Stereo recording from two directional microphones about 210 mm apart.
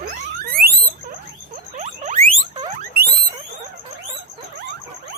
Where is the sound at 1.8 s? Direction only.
35° right (ahead or behind).